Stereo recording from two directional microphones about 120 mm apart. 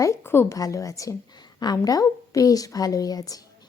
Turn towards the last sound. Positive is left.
turn(degrees=30)  # may be behind; listen again after turning